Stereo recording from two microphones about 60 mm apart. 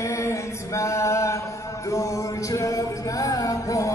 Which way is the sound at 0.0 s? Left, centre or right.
Left.